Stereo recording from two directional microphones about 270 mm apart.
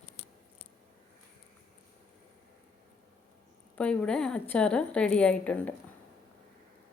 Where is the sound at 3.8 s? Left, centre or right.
Centre.